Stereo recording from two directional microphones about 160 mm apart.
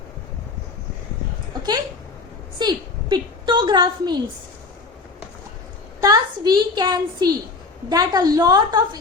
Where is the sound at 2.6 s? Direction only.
25° right (ahead or behind).